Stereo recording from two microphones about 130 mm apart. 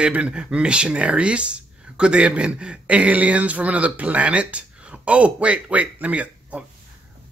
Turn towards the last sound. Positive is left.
turn(degrees=-10)  # may be behind; listen again after turning